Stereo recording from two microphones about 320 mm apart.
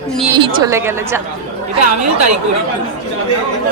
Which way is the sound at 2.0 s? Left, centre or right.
Right.